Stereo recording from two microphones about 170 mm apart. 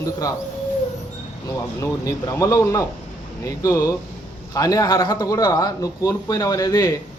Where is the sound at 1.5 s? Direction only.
20° left (ahead or behind).